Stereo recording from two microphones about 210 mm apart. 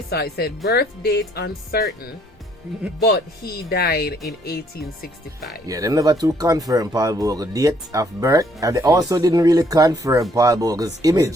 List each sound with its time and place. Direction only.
0.1 s speech: 50° left (ahead or behind)
3.7 s speech: 50° left (ahead or behind)
5.6 s speech: 15° right (ahead or behind)